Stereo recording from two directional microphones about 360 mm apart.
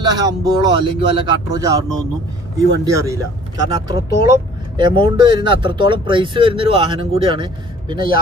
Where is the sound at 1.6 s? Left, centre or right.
Centre.